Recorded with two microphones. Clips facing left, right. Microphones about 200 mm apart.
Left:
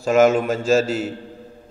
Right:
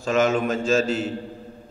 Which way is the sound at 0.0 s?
10° left (ahead or behind).